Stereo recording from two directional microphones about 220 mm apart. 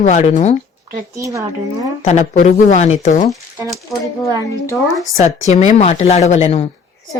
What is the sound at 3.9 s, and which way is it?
Speech, centre (ahead or behind).